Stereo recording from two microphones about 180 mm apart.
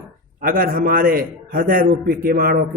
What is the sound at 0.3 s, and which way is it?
Speech, 50° right (ahead or behind).